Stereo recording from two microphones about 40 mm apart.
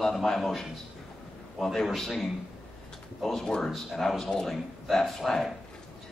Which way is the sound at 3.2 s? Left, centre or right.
Centre.